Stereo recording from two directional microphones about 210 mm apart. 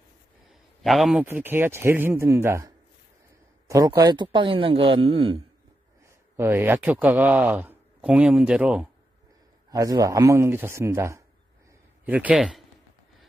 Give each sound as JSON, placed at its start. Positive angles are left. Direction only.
{"t": 0.5, "sound": "a sound", "side_deg": 0}
{"t": 1.2, "sound": "speech", "side_deg": -10}
{"t": 6.3, "sound": "speech", "side_deg": -10}
{"t": 9.7, "sound": "speech", "side_deg": -15}